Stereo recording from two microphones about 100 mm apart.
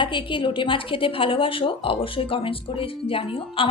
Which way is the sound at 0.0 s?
55° left (ahead or behind).